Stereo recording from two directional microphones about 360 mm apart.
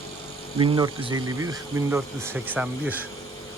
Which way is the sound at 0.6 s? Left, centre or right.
Centre.